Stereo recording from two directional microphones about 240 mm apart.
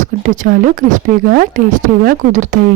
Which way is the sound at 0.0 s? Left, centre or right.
Right.